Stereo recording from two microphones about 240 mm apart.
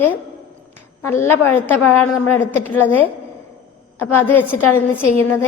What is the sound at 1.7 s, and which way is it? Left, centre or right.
Speech, left.